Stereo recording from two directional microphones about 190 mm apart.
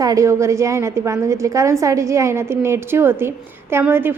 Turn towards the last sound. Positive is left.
turn(degrees=-10)  # may be behind; listen again after turning